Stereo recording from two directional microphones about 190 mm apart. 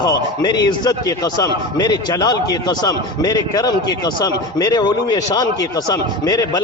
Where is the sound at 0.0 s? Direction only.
20° left (ahead or behind).